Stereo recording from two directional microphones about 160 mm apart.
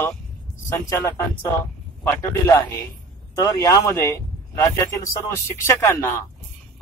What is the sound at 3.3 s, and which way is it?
Speech, 20° left (ahead or behind).